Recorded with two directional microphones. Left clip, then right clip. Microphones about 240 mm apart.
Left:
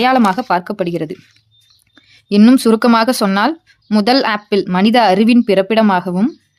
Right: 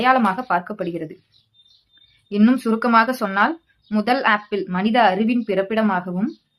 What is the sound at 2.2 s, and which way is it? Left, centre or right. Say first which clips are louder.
Speech: left 8 dB; left.